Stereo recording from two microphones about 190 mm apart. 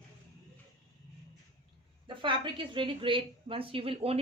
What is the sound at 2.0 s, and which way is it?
A woman's voice, 25° right (ahead or behind).